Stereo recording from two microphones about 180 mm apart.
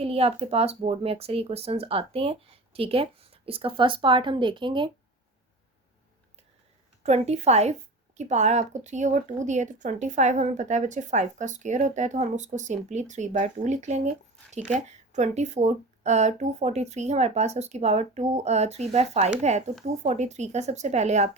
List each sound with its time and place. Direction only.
0.0 s a woman's voice: 35° right (ahead or behind)
7.0 s a woman's voice: 35° right (ahead or behind)